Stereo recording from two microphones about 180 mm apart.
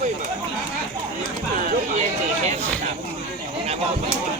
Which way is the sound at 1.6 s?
40° right (ahead or behind).